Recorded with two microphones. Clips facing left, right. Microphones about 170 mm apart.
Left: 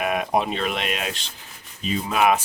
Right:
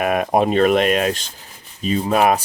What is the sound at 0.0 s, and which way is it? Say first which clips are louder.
Speech: right 5 dB; 50° right (ahead or behind).